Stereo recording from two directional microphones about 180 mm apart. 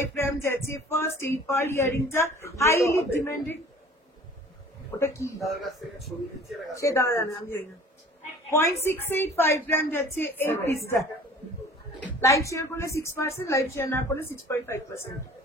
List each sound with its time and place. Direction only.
0.1 s speech: 10° left (ahead or behind)
4.9 s speech: 15° left (ahead or behind)
5.4 s a man's voice: centre (ahead or behind)
6.7 s speech: 15° left (ahead or behind)
8.8 s speech: 10° left (ahead or behind)
12.2 s speech: 15° left (ahead or behind)